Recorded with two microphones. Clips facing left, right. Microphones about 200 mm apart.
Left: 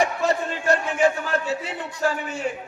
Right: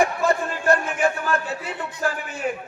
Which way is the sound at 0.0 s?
55° right (ahead or behind).